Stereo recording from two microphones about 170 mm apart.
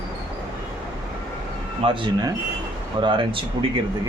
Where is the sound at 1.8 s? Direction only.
30° right (ahead or behind).